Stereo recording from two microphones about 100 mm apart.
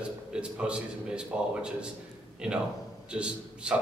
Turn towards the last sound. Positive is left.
turn(degrees=-10)  # may be behind; listen again after turning